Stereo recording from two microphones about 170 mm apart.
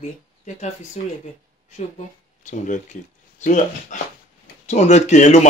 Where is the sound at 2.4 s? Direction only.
50° left (ahead or behind).